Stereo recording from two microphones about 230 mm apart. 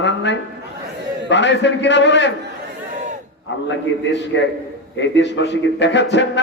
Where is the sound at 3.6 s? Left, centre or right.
Left.